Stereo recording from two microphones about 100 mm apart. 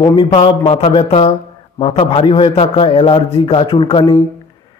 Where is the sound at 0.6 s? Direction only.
70° left (ahead or behind).